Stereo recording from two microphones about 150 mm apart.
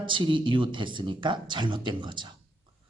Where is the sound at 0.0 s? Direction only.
35° right (ahead or behind).